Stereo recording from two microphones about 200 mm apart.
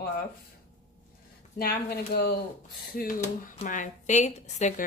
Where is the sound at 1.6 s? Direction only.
50° left (ahead or behind).